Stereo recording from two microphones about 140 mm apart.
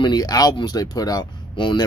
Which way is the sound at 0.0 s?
30° left (ahead or behind).